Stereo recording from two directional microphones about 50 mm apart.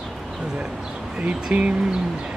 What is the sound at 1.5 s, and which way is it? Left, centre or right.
Speech, right.